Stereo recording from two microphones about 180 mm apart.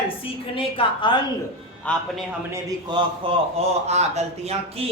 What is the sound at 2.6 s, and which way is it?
A man's voice, 30° right (ahead or behind).